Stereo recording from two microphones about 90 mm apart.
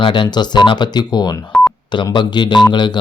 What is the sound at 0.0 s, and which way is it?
Speech, 65° left (ahead or behind).